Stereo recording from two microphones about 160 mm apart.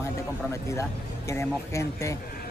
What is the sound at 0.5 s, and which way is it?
Speech, 20° left (ahead or behind).